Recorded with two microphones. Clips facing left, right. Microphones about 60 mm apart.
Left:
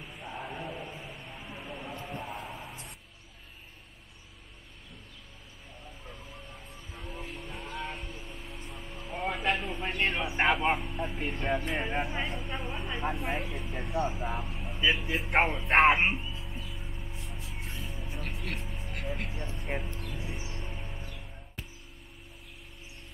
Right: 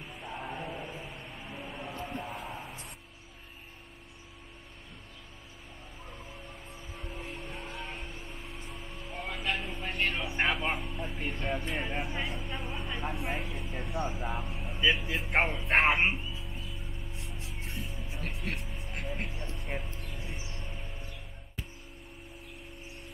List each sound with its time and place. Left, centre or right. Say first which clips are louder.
0.2 s music: even; centre
0.6 s a sound: even; centre
7.0 s music: left 1 dB; centre
7.3 s music: even; right
8.0 s vehicle: even; centre
9.1 s a sound: left 5 dB; centre
9.6 s a sound: left 2 dB; centre
10.8 s speech: left 3 dB; centre
17.2 s music: even; centre
18.6 s vehicle: left 1 dB; centre
19.3 s speech: left 3 dB; centre
20.1 s music: left 3 dB; centre